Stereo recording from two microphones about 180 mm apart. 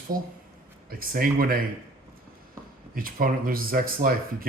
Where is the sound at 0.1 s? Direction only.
50° right (ahead or behind).